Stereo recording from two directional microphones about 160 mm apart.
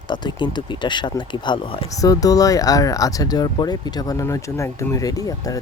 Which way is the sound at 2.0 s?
20° left (ahead or behind).